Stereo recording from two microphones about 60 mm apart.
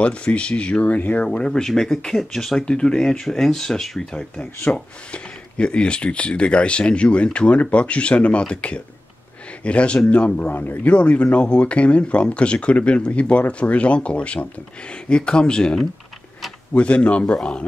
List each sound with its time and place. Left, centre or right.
0.0 s speech: centre